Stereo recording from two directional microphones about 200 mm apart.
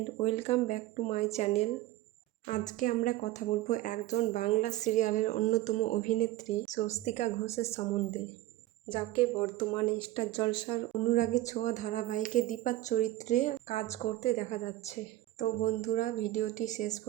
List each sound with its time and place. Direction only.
0.2 s speech: 30° left (ahead or behind)
11.1 s speech: 40° left (ahead or behind)